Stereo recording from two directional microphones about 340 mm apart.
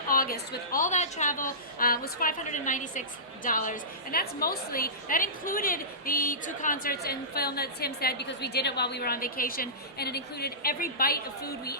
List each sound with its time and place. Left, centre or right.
0.1 s a woman's voice: left